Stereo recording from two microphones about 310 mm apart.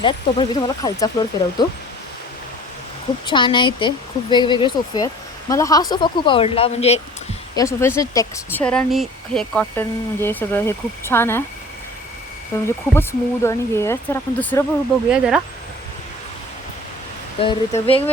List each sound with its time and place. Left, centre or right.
0.0 s speech: centre
3.2 s speech: centre
7.5 s speech: centre
12.6 s speech: centre
17.4 s speech: centre